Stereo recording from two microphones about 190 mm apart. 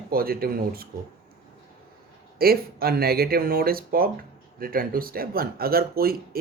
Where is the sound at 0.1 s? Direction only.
50° right (ahead or behind).